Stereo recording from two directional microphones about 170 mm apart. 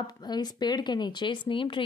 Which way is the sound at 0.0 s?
25° left (ahead or behind).